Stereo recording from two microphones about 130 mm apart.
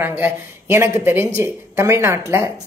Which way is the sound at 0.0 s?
15° right (ahead or behind).